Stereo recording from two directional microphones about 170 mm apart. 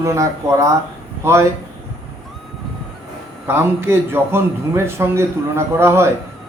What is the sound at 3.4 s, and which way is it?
A man's voice, 15° right (ahead or behind).